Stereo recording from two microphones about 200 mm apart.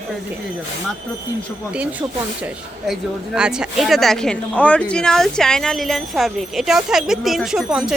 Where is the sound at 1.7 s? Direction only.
5° right (ahead or behind).